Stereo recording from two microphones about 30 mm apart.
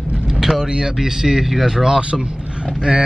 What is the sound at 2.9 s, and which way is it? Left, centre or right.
Speech, right.